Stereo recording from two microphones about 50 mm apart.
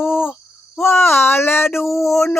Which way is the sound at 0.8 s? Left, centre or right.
Left.